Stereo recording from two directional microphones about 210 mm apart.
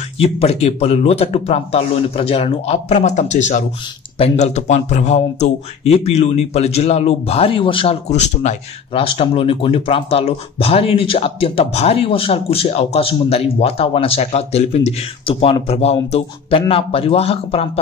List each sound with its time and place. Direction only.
0.2 s speech: 30° left (ahead or behind)